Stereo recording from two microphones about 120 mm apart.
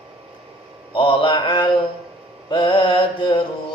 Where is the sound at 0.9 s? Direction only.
45° left (ahead or behind).